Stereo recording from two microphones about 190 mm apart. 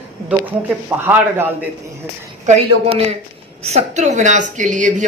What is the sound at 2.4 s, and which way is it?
Speech, 35° right (ahead or behind).